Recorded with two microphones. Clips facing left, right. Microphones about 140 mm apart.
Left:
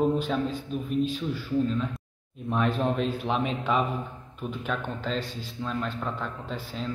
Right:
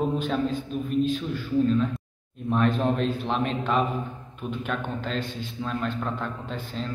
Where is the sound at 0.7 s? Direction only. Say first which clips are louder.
Right 2 dB; centre (ahead or behind).